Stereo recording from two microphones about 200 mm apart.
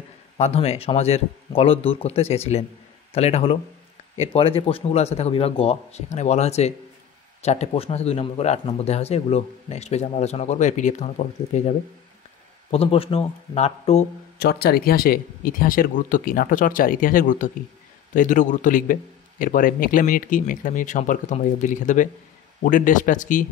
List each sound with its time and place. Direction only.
0.4 s speech: 30° left (ahead or behind)
12.7 s speech: 30° left (ahead or behind)
14.4 s speech: 55° left (ahead or behind)